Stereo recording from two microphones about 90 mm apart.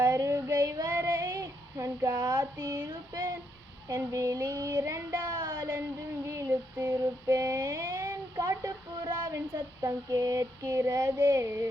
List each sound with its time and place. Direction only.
0.0 s child singing: 40° right (ahead or behind)
3.8 s female singing: 40° right (ahead or behind)
4.9 s child singing: 40° right (ahead or behind)
6.2 s female singing: 35° right (ahead or behind)
11.4 s female singing: 30° right (ahead or behind)